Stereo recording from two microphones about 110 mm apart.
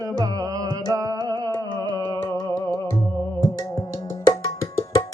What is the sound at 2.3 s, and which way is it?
Music, 25° left (ahead or behind).